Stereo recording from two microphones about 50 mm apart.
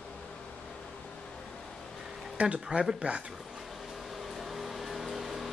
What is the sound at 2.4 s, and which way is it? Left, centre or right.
Speech, right.